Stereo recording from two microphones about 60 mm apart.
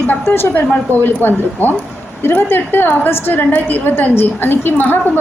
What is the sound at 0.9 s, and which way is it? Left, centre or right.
Speech, right.